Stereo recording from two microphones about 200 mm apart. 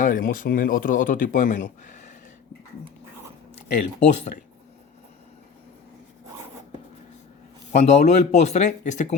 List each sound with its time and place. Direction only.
0.0 s speech: 45° left (ahead or behind)
4.0 s speech: 35° left (ahead or behind)
7.7 s speech: 35° left (ahead or behind)